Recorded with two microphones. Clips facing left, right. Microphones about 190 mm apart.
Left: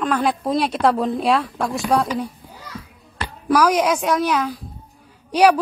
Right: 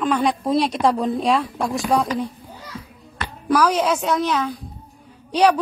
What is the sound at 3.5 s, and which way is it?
A woman's voice, 10° left (ahead or behind).